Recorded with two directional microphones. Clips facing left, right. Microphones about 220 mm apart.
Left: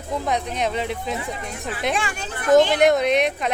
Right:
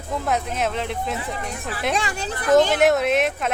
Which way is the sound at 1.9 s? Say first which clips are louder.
Right 2 dB; 40° right (ahead or behind).